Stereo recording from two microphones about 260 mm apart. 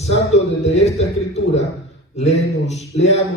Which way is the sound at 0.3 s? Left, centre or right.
Left.